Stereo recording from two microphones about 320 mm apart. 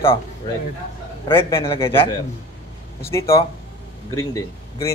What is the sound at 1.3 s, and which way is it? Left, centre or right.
Speech, centre.